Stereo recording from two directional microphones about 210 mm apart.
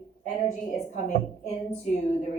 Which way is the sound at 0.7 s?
35° left (ahead or behind).